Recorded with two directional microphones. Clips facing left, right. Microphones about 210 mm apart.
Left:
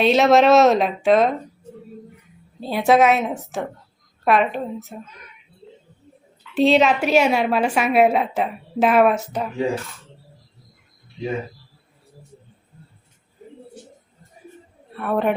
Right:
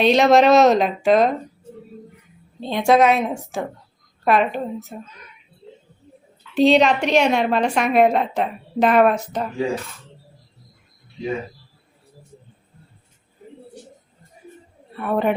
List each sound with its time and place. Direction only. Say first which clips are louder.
0.0 s a woman's voice: right 1 dB; centre (ahead or behind)
2.6 s a woman's voice: even; 5° left (ahead or behind)
6.5 s a woman's voice: right 1 dB; centre (ahead or behind)
14.9 s a woman's voice: even; centre (ahead or behind)